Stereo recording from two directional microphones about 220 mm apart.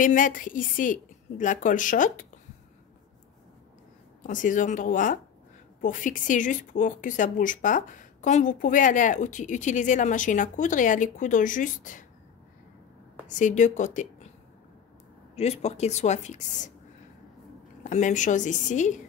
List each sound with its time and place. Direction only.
0.0 s speech: 35° left (ahead or behind)
4.2 s speech: 35° left (ahead or behind)
13.3 s speech: 35° left (ahead or behind)
15.3 s speech: 30° left (ahead or behind)
17.8 s speech: 35° left (ahead or behind)